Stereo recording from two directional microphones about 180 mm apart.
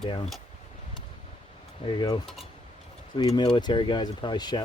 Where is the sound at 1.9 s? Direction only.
25° left (ahead or behind).